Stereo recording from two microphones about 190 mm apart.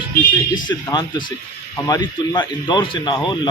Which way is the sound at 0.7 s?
25° left (ahead or behind).